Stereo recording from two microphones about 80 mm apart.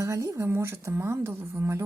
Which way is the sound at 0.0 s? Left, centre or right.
Right.